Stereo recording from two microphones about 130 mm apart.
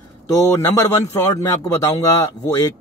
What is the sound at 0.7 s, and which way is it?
Speech, 25° left (ahead or behind).